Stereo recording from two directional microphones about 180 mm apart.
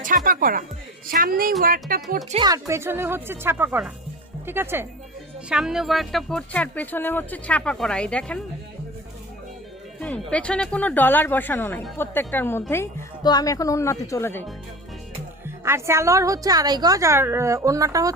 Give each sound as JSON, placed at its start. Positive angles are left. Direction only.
{"t": 0.3, "sound": "a woman's voice", "side_deg": -50}
{"t": 2.3, "sound": "a woman's voice", "side_deg": -20}
{"t": 10.0, "sound": "speech", "side_deg": 5}
{"t": 15.4, "sound": "a woman's voice", "side_deg": -15}